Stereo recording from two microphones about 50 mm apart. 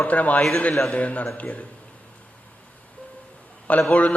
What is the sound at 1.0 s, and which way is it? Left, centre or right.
Speech, left.